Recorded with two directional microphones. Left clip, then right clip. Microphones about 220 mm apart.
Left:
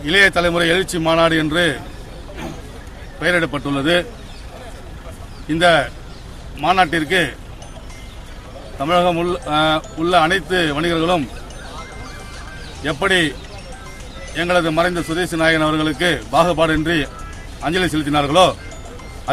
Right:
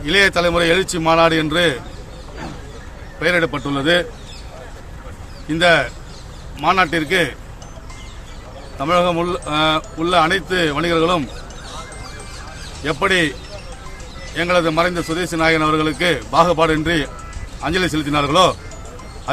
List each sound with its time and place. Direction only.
0.0 s a man's voice: 5° right (ahead or behind)
3.2 s a man's voice: 5° right (ahead or behind)
5.5 s a man's voice: 5° right (ahead or behind)
8.8 s a man's voice: 5° right (ahead or behind)
12.8 s a man's voice: 5° right (ahead or behind)
14.3 s a man's voice: 5° right (ahead or behind)